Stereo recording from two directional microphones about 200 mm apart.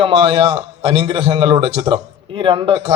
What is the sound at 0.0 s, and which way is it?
A man's voice, 25° right (ahead or behind).